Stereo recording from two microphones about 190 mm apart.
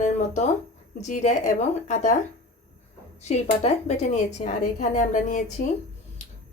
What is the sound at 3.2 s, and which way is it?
Speech, 35° left (ahead or behind).